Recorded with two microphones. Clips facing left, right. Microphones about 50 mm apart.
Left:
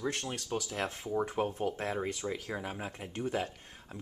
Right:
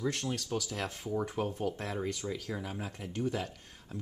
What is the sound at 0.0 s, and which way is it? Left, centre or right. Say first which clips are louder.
Speech: right 1 dB; centre.